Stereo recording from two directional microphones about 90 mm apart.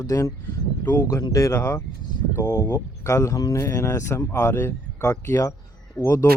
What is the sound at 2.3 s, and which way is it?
Speech, 45° left (ahead or behind).